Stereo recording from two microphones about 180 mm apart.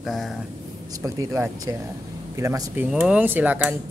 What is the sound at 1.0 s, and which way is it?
Speech, 15° right (ahead or behind).